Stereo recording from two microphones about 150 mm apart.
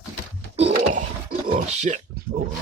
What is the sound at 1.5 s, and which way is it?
Speech, 50° right (ahead or behind).